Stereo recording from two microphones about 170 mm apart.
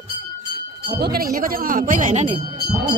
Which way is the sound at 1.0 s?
60° right (ahead or behind).